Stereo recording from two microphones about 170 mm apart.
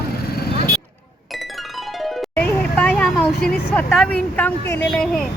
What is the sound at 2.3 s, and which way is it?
Speech, 10° left (ahead or behind).